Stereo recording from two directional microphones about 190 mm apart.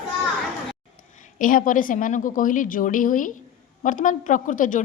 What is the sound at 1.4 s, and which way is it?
A woman's voice, 45° left (ahead or behind).